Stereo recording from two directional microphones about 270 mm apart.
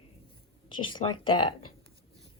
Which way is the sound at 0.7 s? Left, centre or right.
Centre.